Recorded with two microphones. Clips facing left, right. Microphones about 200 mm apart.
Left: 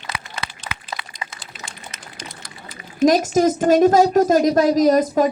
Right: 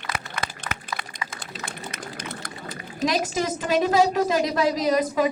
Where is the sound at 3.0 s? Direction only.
45° left (ahead or behind).